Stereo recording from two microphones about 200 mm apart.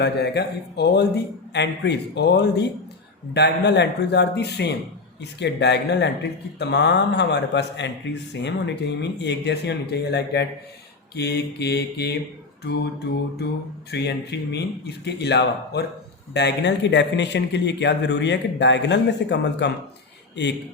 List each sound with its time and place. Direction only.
0.0 s a man's voice: 55° left (ahead or behind)
13.9 s a man's voice: 60° left (ahead or behind)